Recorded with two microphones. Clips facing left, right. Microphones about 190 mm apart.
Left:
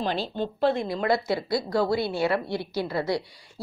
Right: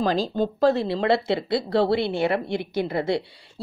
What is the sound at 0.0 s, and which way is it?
Speech, 40° right (ahead or behind).